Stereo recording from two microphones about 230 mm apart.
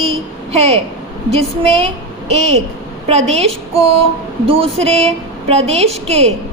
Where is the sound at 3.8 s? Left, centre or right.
Right.